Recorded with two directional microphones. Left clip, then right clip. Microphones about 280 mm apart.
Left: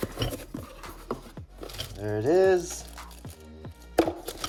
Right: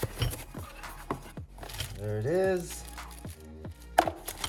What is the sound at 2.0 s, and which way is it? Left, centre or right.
Speech, centre.